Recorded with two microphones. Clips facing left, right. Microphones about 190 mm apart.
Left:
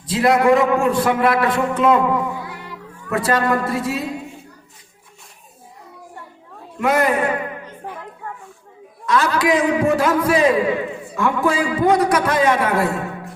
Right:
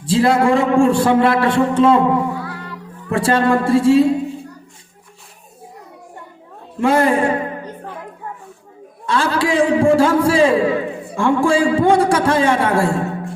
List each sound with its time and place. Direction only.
0.0 s a man's voice: 30° right (ahead or behind)
3.1 s a man's voice: 30° right (ahead or behind)
6.7 s a man's voice: 30° right (ahead or behind)
9.0 s a man's voice: 30° right (ahead or behind)